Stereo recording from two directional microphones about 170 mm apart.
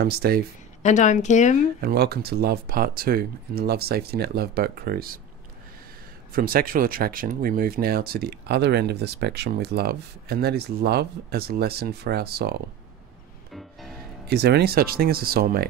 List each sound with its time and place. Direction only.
0.0 s speech: 65° right (ahead or behind)
0.8 s speech: 45° left (ahead or behind)
1.8 s speech: 70° right (ahead or behind)
6.3 s speech: 60° right (ahead or behind)
13.5 s music: centre (ahead or behind)
14.2 s speech: 75° right (ahead or behind)